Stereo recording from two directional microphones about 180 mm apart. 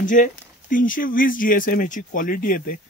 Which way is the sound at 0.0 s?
45° left (ahead or behind).